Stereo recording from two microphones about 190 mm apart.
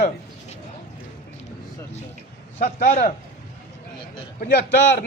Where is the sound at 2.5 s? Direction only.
40° left (ahead or behind).